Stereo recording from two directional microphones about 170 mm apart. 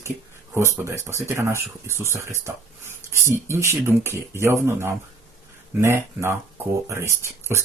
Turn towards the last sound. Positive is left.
turn(degrees=-15)  # may be behind; listen again after turning